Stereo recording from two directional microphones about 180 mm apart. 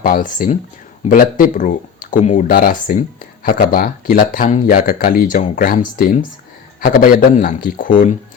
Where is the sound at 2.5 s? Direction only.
55° left (ahead or behind).